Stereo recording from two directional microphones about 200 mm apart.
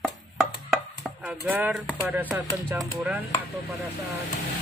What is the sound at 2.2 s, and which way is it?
Speech, 10° right (ahead or behind).